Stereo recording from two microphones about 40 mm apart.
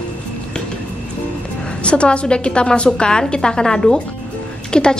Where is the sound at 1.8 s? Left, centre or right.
Left.